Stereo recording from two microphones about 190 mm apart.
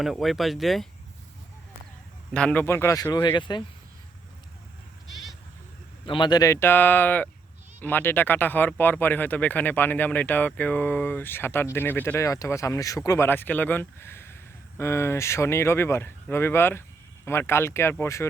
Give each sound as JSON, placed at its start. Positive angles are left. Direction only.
{"t": 0.0, "sound": "speech", "side_deg": 0}
{"t": 2.3, "sound": "speech", "side_deg": 5}
{"t": 6.1, "sound": "speech", "side_deg": 25}